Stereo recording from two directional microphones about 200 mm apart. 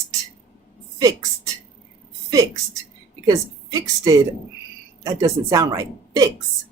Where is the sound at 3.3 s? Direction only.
15° right (ahead or behind).